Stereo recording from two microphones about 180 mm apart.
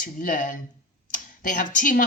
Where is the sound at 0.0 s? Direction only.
50° left (ahead or behind).